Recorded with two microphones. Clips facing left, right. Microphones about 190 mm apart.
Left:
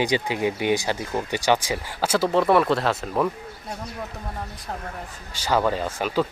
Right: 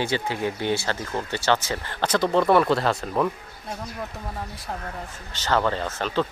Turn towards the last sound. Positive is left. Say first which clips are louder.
# left 2 dB
turn(degrees=10)  # may be behind; listen again after turning